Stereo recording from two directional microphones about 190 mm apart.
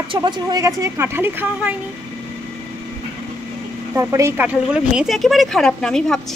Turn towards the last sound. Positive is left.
turn(degrees=5)  # may be behind; listen again after turning